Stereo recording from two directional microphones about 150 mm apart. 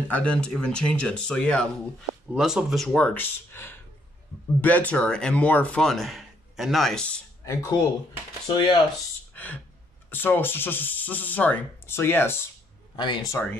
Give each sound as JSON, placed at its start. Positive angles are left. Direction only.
{"t": 0.1, "sound": "speech", "side_deg": 5}
{"t": 2.3, "sound": "speech", "side_deg": -5}
{"t": 7.4, "sound": "speech", "side_deg": 20}
{"t": 9.3, "sound": "a sound", "side_deg": 10}
{"t": 10.0, "sound": "speech", "side_deg": 15}
{"t": 12.9, "sound": "speech", "side_deg": 30}
{"t": 13.3, "sound": "speech", "side_deg": 10}